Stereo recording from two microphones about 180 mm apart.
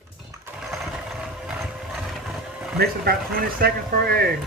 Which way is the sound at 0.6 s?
Centre (ahead or behind).